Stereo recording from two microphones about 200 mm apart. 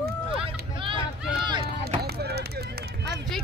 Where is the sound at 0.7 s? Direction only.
25° right (ahead or behind).